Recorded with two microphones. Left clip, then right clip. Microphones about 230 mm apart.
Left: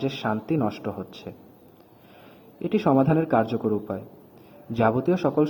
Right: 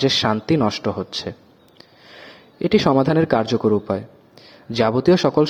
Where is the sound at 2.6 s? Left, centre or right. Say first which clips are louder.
Right 5 dB; right.